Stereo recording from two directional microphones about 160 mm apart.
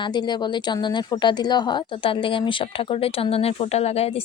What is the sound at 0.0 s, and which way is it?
A woman's voice, 25° left (ahead or behind).